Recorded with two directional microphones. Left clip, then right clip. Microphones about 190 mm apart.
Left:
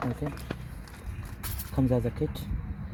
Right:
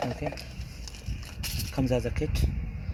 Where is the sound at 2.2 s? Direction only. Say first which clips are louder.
Left 1 dB; 10° left (ahead or behind).